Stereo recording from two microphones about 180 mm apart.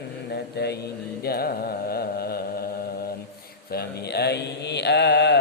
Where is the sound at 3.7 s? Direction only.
60° left (ahead or behind).